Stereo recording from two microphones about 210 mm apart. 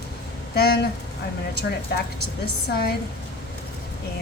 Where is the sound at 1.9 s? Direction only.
50° left (ahead or behind).